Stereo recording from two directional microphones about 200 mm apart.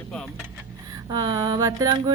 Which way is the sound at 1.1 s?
20° right (ahead or behind).